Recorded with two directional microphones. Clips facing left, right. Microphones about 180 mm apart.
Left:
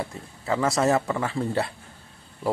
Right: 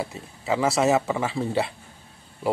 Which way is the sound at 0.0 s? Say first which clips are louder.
Right 1 dB; 10° right (ahead or behind).